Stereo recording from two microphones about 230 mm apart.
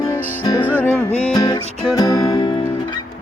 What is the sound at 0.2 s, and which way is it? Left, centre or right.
Music, centre.